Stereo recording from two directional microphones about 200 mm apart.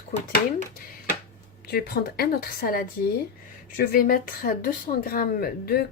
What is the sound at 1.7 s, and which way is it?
Speech, 50° left (ahead or behind).